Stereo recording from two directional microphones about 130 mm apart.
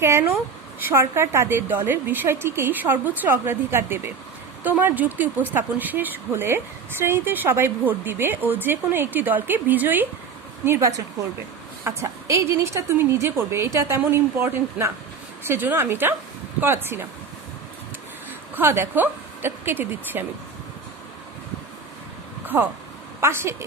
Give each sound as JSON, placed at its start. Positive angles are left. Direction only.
{"t": 0.0, "sound": "a woman's voice", "side_deg": -20}
{"t": 18.5, "sound": "a woman's voice", "side_deg": -20}
{"t": 22.4, "sound": "a woman's voice", "side_deg": -15}